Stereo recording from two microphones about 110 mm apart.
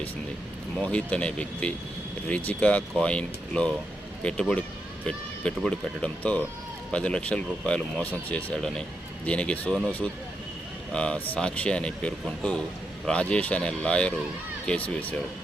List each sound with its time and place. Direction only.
0.8 s speech: 10° left (ahead or behind)
10.9 s a man's voice: 10° left (ahead or behind)